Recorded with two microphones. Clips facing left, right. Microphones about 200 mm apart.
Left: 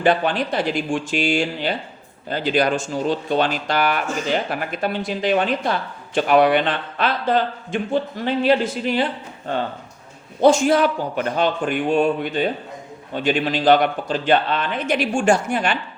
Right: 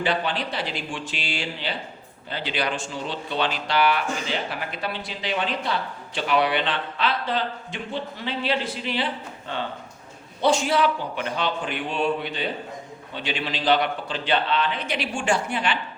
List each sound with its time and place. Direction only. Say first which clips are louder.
0.0 s speech: left 7 dB; 50° left (ahead or behind)